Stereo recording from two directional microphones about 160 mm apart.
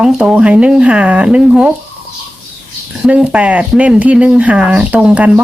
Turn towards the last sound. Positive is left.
turn(degrees=-5)  # may be behind; listen again after turning